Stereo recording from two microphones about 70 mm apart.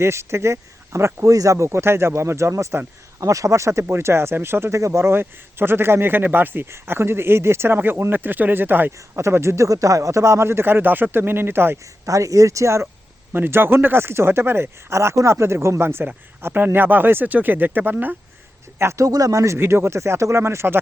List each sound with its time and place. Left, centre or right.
0.0 s speech: right
9.1 s speech: right
9.6 s speech: right
12.0 s speech: right
13.3 s speech: right
18.8 s speech: right
19.5 s speech: right